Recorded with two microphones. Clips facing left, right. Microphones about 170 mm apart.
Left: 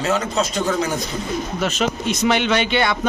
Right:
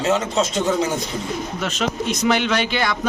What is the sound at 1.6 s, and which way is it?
A man's voice, centre (ahead or behind).